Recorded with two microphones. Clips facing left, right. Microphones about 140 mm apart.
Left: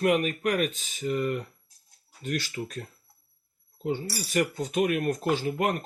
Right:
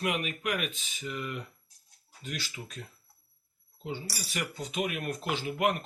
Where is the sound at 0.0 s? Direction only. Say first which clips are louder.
Left 8 dB; 45° left (ahead or behind).